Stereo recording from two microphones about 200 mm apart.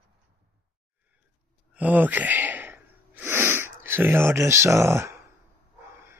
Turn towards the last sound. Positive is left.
turn(degrees=-15)  # may be behind; listen again after turning